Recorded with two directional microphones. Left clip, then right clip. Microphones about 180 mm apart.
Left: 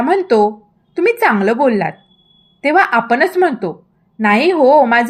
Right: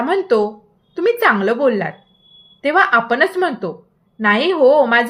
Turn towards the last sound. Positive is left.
turn(degrees=20)  # may be behind; listen again after turning